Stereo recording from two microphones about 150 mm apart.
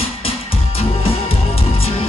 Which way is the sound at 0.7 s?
40° left (ahead or behind).